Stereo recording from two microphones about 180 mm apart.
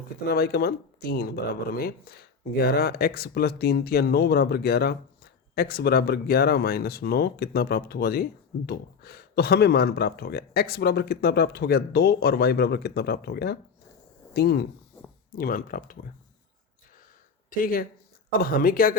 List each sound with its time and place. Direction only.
0.3 s speech: 60° left (ahead or behind)
15.4 s speech: 50° left (ahead or behind)
17.5 s speech: 50° left (ahead or behind)